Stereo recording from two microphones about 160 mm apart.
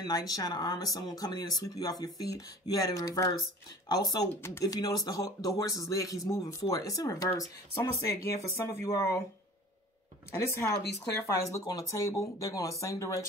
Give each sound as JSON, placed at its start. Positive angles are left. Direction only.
{"t": 0.0, "sound": "speech", "side_deg": 25}
{"t": 10.3, "sound": "speech", "side_deg": 20}